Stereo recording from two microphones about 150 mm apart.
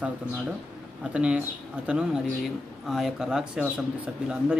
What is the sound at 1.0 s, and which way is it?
Speech, 5° right (ahead or behind).